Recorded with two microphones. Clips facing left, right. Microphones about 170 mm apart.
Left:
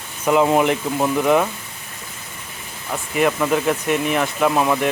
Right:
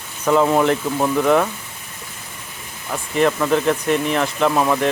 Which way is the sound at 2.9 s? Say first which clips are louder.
Right 1 dB; 10° left (ahead or behind).